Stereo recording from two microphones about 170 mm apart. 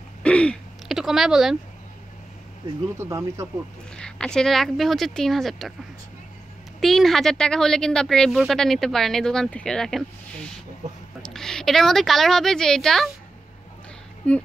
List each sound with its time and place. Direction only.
0.2 s a sound: 5° left (ahead or behind)
3.0 s speech: 15° right (ahead or behind)
3.9 s speech: 5° left (ahead or behind)
6.8 s speech: centre (ahead or behind)
14.2 s speech: 10° left (ahead or behind)